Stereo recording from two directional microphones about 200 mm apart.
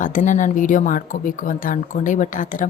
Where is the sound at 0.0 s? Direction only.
40° left (ahead or behind).